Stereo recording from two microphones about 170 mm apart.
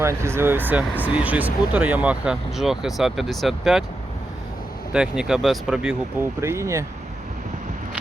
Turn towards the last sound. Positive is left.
turn(degrees=-15)  # may be behind; listen again after turning